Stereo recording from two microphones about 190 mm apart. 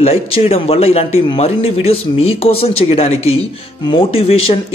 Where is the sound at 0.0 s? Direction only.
30° left (ahead or behind).